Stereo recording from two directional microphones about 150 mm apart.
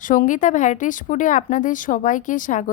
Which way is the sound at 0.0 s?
60° left (ahead or behind).